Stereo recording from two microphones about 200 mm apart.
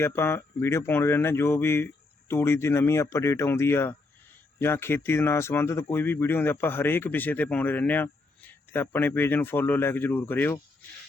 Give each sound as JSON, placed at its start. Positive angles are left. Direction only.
{"t": 0.0, "sound": "speech", "side_deg": 10}